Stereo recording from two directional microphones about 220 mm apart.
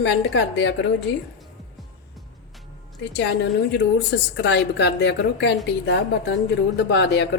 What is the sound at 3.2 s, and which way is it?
A woman's voice, 50° left (ahead or behind).